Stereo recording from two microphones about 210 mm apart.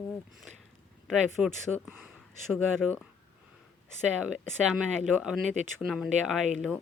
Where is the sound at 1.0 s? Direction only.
Centre (ahead or behind).